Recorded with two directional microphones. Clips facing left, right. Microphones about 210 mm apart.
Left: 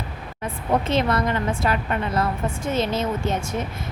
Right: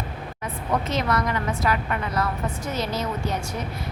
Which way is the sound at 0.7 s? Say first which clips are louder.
Left 3 dB; 30° left (ahead or behind).